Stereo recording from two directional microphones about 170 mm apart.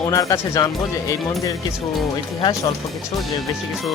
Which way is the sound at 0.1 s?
20° left (ahead or behind).